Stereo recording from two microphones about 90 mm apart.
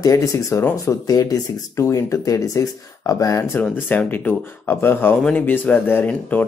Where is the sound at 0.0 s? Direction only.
35° left (ahead or behind).